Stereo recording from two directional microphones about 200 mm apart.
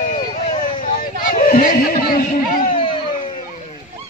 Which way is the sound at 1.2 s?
45° left (ahead or behind).